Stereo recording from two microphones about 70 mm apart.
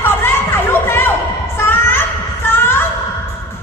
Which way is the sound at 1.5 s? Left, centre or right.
Left.